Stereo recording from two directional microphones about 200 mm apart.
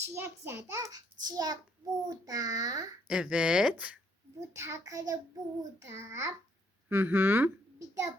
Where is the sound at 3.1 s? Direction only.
5° right (ahead or behind).